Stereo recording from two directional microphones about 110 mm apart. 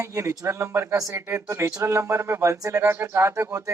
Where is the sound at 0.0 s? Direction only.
25° right (ahead or behind).